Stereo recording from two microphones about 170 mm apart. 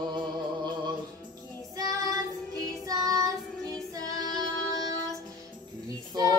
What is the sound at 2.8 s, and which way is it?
Child singing, 20° right (ahead or behind).